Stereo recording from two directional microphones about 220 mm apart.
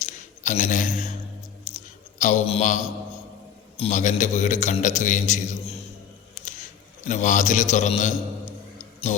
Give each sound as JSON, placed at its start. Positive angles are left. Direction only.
{"t": 0.0, "sound": "a sound", "side_deg": 35}
{"t": 3.8, "sound": "a man's voice", "side_deg": 30}
{"t": 7.1, "sound": "a man's voice", "side_deg": 35}
{"t": 8.8, "sound": "music", "side_deg": 30}